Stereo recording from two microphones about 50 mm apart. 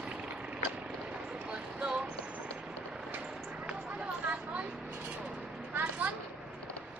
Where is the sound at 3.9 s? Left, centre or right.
Right.